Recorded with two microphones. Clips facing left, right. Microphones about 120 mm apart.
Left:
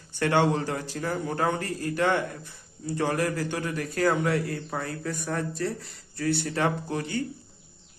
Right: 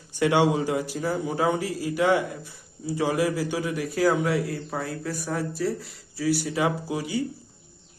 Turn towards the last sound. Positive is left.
turn(degrees=-5)  # may be behind; listen again after turning